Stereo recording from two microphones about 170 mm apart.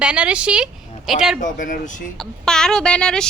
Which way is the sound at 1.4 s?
50° left (ahead or behind).